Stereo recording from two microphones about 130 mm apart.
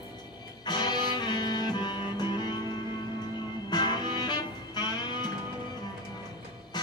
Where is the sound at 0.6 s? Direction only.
35° left (ahead or behind).